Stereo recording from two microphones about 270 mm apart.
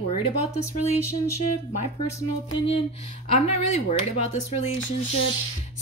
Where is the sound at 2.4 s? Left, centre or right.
Left.